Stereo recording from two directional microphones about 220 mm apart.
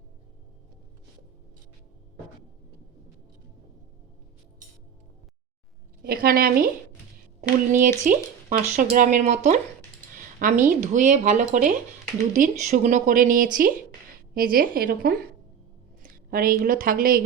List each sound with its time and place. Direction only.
6.0 s a woman's voice: 45° right (ahead or behind)
7.7 s a woman's voice: 35° right (ahead or behind)